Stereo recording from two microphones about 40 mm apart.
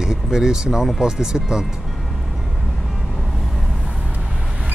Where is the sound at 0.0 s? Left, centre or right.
Centre.